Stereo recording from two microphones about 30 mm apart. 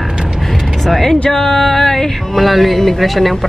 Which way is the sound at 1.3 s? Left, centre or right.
Centre.